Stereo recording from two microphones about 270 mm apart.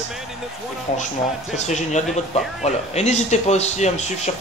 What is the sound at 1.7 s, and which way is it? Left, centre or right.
Speech, left.